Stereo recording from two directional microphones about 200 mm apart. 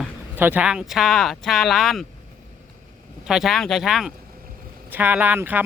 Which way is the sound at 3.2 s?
Centre (ahead or behind).